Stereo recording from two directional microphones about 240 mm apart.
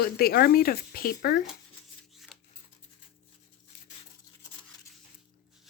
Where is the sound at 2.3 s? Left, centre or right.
Centre.